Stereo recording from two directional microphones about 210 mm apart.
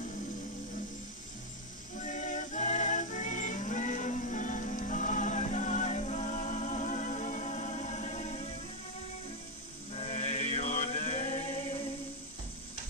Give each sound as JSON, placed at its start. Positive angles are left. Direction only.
{"t": 2.0, "sound": "music", "side_deg": 35}
{"t": 9.9, "sound": "music", "side_deg": 30}